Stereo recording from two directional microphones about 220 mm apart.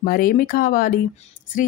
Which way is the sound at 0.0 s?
40° left (ahead or behind).